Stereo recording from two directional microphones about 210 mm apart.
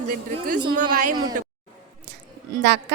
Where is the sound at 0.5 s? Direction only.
20° right (ahead or behind).